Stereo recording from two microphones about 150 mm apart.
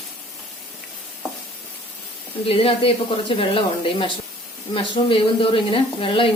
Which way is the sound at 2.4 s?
40° left (ahead or behind).